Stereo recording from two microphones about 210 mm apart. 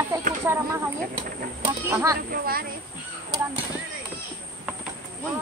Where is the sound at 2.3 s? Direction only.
45° right (ahead or behind).